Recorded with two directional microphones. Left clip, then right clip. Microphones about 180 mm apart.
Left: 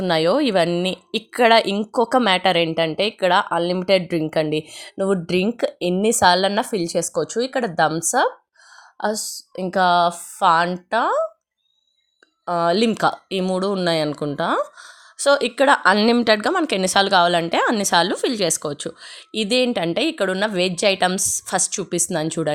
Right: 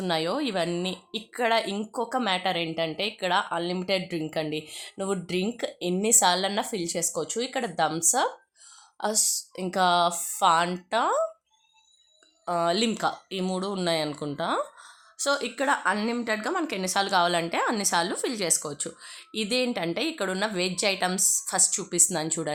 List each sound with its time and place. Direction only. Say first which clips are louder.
0.0 s speech: left 9 dB; 40° left (ahead or behind)
12.5 s speech: left 7 dB; 30° left (ahead or behind)